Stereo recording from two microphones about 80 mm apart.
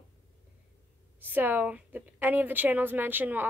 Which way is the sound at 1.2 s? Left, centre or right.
Right.